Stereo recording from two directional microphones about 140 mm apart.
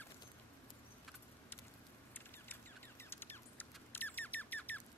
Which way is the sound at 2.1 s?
15° left (ahead or behind).